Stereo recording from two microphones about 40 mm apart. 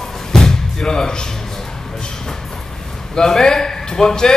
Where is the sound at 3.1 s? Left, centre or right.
Centre.